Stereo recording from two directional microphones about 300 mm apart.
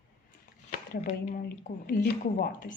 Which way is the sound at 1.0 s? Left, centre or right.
Left.